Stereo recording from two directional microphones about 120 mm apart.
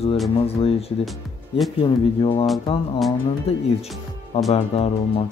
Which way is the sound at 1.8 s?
45° left (ahead or behind).